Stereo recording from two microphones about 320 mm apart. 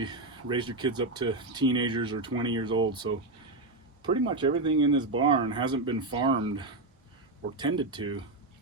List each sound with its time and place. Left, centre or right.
0.0 s speech: centre